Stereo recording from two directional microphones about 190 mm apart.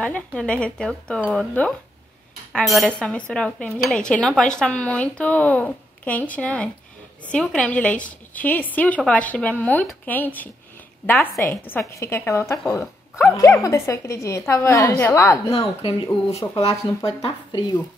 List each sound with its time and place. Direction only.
0.0 s a woman's voice: 5° left (ahead or behind)
15.5 s speech: 30° left (ahead or behind)